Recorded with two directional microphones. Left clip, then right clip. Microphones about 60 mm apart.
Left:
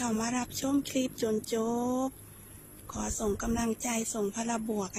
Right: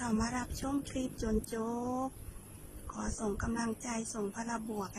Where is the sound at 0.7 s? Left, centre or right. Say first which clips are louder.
Left 8 dB; left.